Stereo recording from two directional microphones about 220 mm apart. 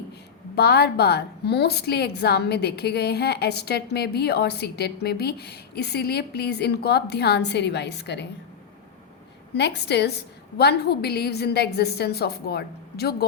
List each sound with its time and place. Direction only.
0.5 s a woman's voice: 45° left (ahead or behind)
9.6 s a woman's voice: 50° left (ahead or behind)